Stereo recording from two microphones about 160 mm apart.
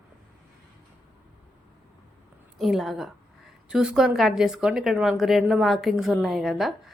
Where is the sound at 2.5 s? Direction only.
Centre (ahead or behind).